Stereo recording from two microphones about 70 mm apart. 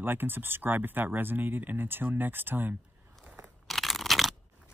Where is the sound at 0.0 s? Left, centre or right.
Right.